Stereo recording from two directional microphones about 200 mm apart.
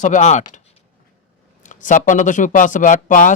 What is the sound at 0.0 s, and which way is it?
Speech, 35° left (ahead or behind).